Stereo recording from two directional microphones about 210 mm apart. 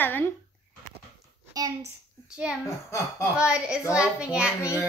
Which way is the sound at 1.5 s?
15° right (ahead or behind).